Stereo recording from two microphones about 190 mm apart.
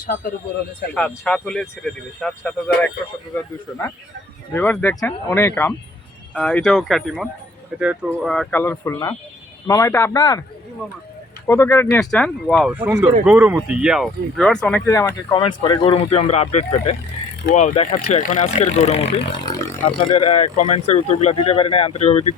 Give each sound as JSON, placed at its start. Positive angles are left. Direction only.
{"t": 0.0, "sound": "speech", "side_deg": 45}
{"t": 0.9, "sound": "speech", "side_deg": 5}
{"t": 11.4, "sound": "speech", "side_deg": 15}
{"t": 12.6, "sound": "speech", "side_deg": -10}
{"t": 14.8, "sound": "speech", "side_deg": 15}
{"t": 19.6, "sound": "speech", "side_deg": 10}
{"t": 20.1, "sound": "speech", "side_deg": 30}